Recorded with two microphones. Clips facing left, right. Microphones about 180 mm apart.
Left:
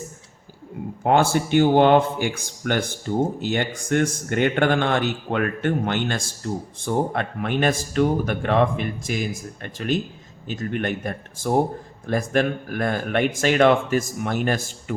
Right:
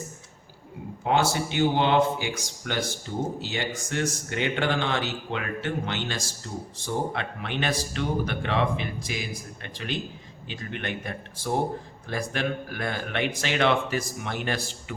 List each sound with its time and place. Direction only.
1.0 s speech: 55° left (ahead or behind)